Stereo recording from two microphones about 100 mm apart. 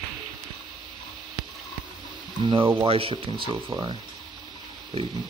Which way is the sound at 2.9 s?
65° right (ahead or behind).